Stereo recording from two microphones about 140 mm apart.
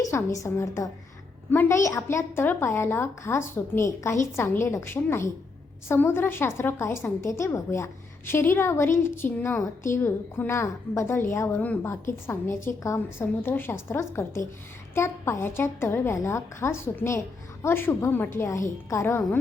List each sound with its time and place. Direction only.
0.0 s a woman's voice: 20° left (ahead or behind)